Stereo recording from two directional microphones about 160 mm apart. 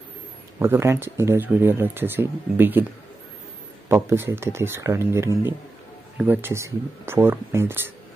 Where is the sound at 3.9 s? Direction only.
15° right (ahead or behind).